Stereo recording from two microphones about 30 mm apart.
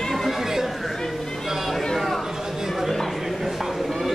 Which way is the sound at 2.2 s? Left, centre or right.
Centre.